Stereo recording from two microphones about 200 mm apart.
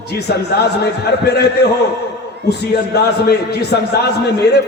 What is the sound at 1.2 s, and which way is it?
Speech, 55° left (ahead or behind).